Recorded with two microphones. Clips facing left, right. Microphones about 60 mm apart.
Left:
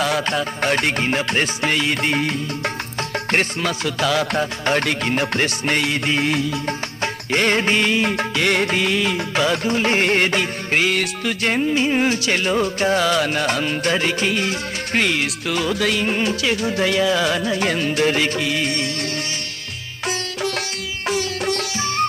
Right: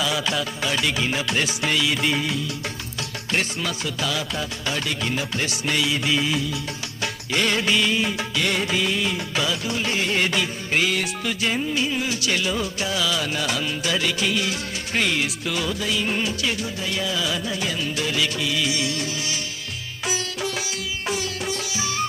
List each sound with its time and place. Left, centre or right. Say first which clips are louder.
0.0 s music: left 4 dB; left
7.0 s music: left 4 dB; left
14.9 s music: left 3 dB; left
15.7 s music of bollywood: left 5 dB; left
16.2 s music: left 5 dB; left
16.5 s music: left 8 dB; left
21.4 s sitar: left 5 dB; left